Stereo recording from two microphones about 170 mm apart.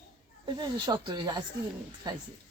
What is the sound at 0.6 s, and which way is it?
Speech, 25° right (ahead or behind).